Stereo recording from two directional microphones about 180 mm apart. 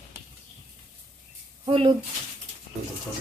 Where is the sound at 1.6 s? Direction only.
30° right (ahead or behind).